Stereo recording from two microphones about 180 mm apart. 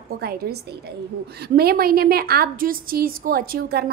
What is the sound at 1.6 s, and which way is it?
A woman's voice, 55° right (ahead or behind).